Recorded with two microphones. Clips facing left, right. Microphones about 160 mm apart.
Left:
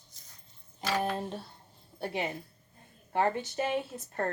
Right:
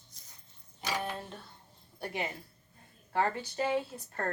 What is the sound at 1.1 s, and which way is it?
Speech, 35° left (ahead or behind).